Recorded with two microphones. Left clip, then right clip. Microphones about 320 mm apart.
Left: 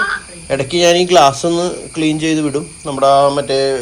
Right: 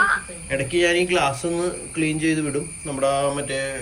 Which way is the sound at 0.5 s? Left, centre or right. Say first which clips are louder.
Left 8 dB; centre.